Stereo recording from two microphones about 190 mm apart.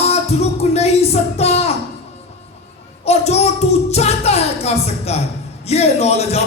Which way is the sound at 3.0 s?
35° left (ahead or behind).